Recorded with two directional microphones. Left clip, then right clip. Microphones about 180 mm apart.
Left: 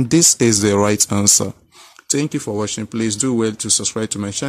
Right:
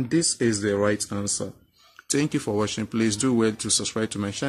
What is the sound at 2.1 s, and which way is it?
Speech, 20° left (ahead or behind).